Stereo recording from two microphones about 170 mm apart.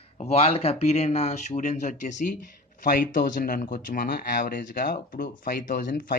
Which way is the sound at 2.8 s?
60° left (ahead or behind).